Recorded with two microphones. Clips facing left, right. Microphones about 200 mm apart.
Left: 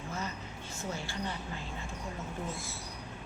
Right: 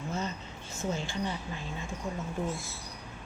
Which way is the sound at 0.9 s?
20° right (ahead or behind).